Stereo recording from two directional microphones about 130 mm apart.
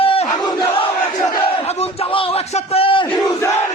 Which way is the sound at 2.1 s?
45° left (ahead or behind).